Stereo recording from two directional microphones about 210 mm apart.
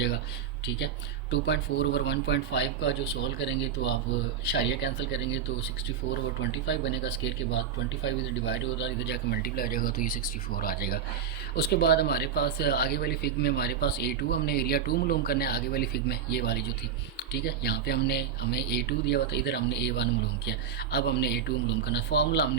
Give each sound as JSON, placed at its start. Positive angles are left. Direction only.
{"t": 1.3, "sound": "speech", "side_deg": 55}
{"t": 6.7, "sound": "speech", "side_deg": 55}